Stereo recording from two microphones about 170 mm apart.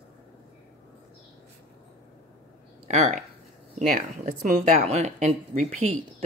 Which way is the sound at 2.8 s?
40° right (ahead or behind).